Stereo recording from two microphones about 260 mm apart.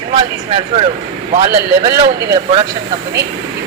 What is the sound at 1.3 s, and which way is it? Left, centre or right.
Speech, right.